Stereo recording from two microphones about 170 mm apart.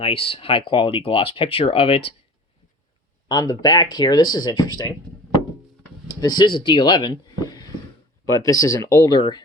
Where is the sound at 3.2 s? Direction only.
20° left (ahead or behind).